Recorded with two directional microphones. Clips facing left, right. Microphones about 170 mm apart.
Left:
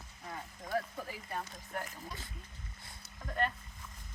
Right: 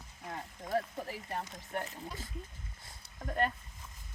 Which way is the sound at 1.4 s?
20° right (ahead or behind).